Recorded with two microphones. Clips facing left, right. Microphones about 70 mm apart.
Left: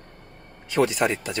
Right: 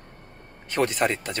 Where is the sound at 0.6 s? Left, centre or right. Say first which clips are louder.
Left 2 dB; right.